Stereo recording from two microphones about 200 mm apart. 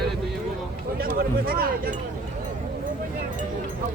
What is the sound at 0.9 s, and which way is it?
Speech, 45° right (ahead or behind).